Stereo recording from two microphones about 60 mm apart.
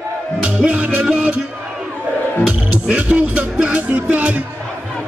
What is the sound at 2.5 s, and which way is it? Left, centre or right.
Music, right.